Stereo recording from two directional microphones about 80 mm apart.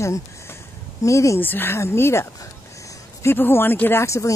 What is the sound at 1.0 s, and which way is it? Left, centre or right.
Speech, left.